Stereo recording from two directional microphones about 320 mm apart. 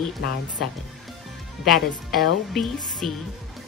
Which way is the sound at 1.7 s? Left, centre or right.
Centre.